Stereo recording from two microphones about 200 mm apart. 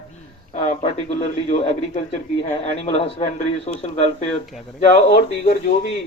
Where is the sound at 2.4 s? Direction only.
30° left (ahead or behind).